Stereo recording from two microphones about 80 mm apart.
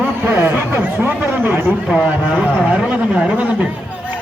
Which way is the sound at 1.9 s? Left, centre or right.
Centre.